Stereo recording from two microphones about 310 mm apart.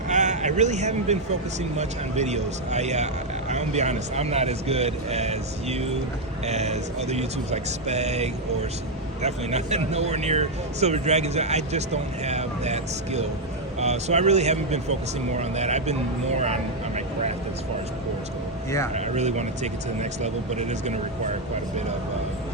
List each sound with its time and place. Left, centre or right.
0.1 s speech: right
16.4 s vehicle: right
18.9 s speech: right